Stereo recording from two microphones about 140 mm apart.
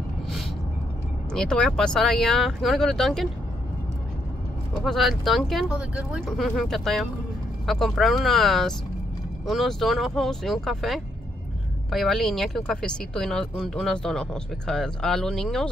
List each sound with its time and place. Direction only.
1.3 s speech: 5° left (ahead or behind)
4.7 s speech: centre (ahead or behind)